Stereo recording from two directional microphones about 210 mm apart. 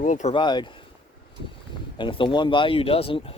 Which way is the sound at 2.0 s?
25° left (ahead or behind).